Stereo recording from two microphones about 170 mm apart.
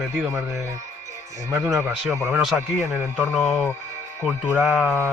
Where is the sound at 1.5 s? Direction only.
15° right (ahead or behind).